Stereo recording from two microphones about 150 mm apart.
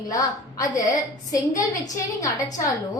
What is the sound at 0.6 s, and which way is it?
A woman's voice, 25° left (ahead or behind).